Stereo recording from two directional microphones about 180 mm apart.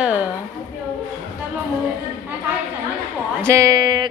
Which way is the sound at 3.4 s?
15° right (ahead or behind).